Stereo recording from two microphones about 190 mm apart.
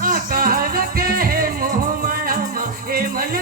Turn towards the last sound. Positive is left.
turn(degrees=-50)  # may be behind; listen again after turning